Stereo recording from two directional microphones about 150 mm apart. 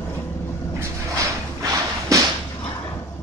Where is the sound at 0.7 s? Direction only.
20° right (ahead or behind).